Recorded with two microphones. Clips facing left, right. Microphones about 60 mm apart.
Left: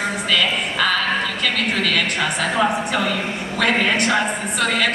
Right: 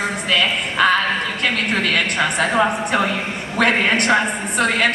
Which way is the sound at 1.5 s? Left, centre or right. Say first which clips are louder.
Even; right.